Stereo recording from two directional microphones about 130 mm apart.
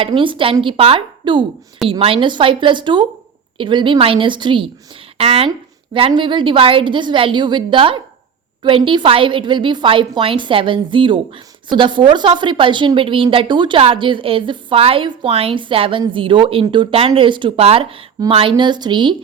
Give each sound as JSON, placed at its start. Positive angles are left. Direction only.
{"t": 0.0, "sound": "a woman's voice", "side_deg": -40}
{"t": 5.1, "sound": "a woman's voice", "side_deg": -50}